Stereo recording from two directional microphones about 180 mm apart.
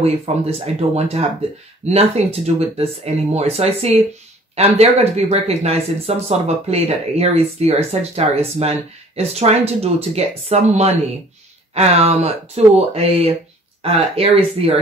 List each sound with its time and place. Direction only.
0.0 s speech: 35° right (ahead or behind)